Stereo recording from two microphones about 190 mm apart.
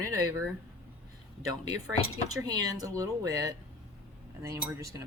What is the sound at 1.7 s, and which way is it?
Speech, 15° right (ahead or behind).